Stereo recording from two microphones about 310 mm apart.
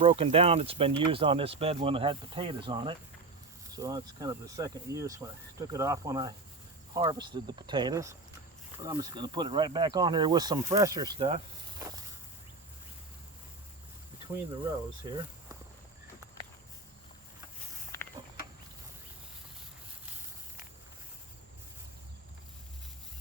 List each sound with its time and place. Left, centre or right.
0.0 s speech: centre